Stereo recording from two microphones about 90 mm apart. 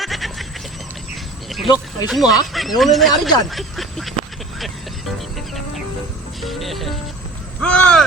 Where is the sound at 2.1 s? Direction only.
5° right (ahead or behind).